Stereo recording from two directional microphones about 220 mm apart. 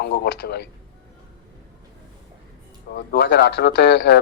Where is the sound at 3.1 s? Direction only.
50° left (ahead or behind).